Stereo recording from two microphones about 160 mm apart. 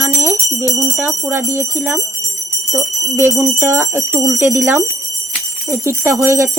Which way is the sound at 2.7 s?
Centre (ahead or behind).